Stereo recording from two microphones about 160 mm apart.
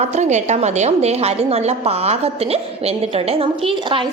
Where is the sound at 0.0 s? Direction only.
45° right (ahead or behind).